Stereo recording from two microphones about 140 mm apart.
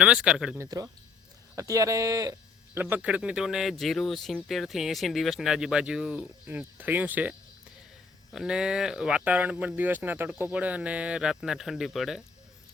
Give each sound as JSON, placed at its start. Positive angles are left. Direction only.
{"t": 0.0, "sound": "speech", "side_deg": -5}
{"t": 0.6, "sound": "speech", "side_deg": -25}
{"t": 2.9, "sound": "speech", "side_deg": -10}